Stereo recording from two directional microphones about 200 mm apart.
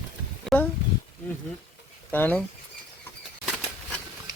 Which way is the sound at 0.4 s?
5° left (ahead or behind).